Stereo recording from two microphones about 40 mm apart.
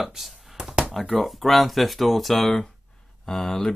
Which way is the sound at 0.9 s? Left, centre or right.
Centre.